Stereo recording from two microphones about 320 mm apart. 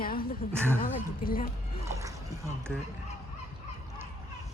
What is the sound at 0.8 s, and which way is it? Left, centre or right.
Speech, left.